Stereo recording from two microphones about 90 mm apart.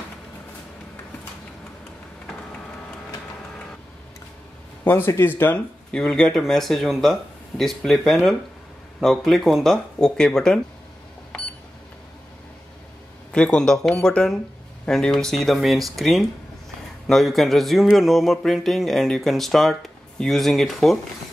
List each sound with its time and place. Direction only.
4.8 s speech: 25° left (ahead or behind)
5.9 s speech: 10° left (ahead or behind)
13.3 s speech: 10° left (ahead or behind)